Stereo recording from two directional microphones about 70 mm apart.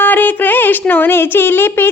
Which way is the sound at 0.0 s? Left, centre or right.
Left.